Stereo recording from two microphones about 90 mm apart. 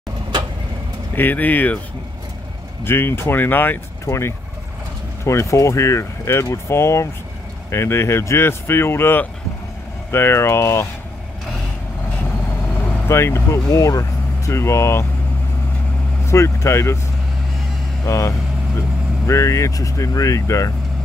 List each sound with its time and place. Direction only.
1.1 s speech: 20° left (ahead or behind)
2.8 s speech: 25° left (ahead or behind)
5.2 s speech: 30° left (ahead or behind)
13.1 s speech: 30° left (ahead or behind)
16.3 s speech: 35° left (ahead or behind)
18.0 s speech: 35° left (ahead or behind)